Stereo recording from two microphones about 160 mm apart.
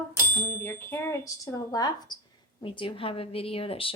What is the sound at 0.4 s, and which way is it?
Speech, 15° left (ahead or behind).